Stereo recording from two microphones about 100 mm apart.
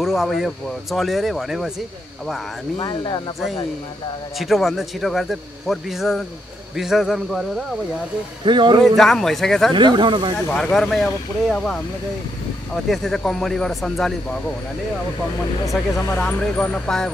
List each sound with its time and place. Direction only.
0.0 s a man's voice: 5° right (ahead or behind)
2.8 s speech: 45° left (ahead or behind)
4.4 s a man's voice: centre (ahead or behind)
8.5 s speech: 50° right (ahead or behind)
8.8 s a man's voice: centre (ahead or behind)
9.8 s speech: 50° right (ahead or behind)
10.5 s a man's voice: 5° left (ahead or behind)
16.2 s speech: 15° left (ahead or behind)